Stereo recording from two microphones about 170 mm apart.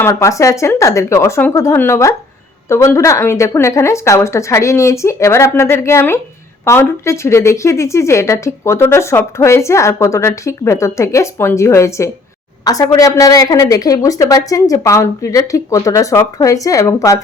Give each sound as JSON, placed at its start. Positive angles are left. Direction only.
{"t": 0.0, "sound": "a woman's voice", "side_deg": 15}